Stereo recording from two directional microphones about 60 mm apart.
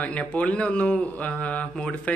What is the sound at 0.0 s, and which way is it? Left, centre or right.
Speech, left.